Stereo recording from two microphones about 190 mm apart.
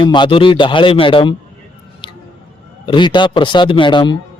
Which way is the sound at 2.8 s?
25° left (ahead or behind).